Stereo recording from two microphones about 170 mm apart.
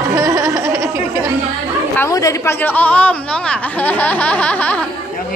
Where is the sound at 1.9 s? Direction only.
15° left (ahead or behind).